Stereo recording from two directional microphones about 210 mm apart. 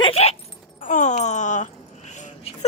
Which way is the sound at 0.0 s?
30° left (ahead or behind).